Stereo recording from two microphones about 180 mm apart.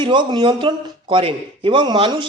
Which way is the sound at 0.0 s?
25° right (ahead or behind).